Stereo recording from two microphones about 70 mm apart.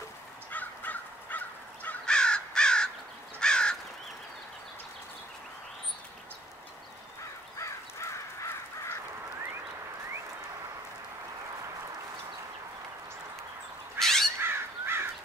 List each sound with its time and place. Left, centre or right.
0.5 s crow: left
2.0 s crow: centre
7.5 s crow: left
13.9 s crow: centre
14.4 s crow: right